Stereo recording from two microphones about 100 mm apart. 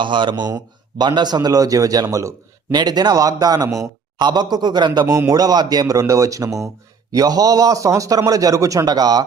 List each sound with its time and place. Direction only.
0.0 s a man's voice: 50° right (ahead or behind)